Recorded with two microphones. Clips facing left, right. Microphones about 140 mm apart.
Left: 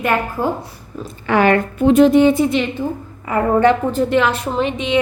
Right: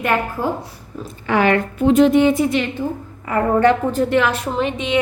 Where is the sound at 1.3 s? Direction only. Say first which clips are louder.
Left 2 dB; 50° left (ahead or behind).